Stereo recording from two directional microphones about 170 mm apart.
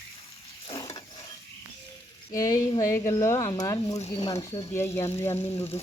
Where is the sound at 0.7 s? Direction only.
25° left (ahead or behind).